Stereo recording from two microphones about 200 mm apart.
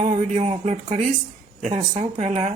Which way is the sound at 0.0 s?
35° right (ahead or behind).